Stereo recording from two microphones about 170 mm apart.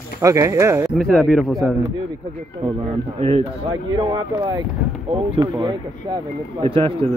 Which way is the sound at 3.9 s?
25° right (ahead or behind).